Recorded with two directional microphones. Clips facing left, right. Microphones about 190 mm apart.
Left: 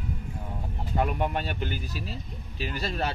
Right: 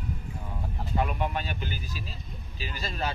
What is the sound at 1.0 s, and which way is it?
A man's voice, 50° left (ahead or behind).